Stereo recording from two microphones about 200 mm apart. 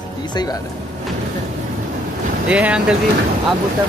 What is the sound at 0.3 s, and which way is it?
Speech, 20° left (ahead or behind).